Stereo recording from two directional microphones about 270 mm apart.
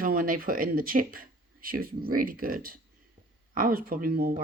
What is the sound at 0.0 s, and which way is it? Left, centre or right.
Speech, right.